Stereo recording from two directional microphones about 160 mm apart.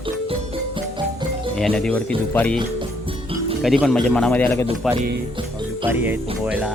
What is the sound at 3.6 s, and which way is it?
Speech, centre (ahead or behind).